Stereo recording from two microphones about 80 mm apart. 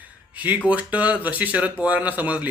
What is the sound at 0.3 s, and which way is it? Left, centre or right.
A man's voice, right.